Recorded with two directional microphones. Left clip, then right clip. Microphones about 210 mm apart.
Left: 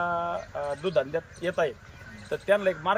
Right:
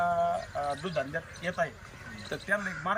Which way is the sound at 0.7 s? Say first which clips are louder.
Left 9 dB; 35° left (ahead or behind).